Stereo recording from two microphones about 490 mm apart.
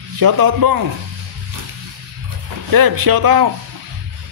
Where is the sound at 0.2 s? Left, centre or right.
Right.